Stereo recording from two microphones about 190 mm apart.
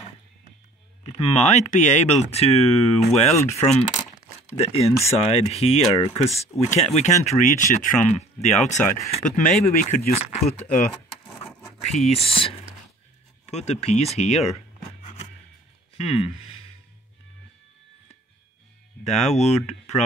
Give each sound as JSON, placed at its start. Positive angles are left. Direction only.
{"t": 1.0, "sound": "speech", "side_deg": 35}
{"t": 12.1, "sound": "speech", "side_deg": 30}
{"t": 16.0, "sound": "speech", "side_deg": 35}
{"t": 19.0, "sound": "speech", "side_deg": 35}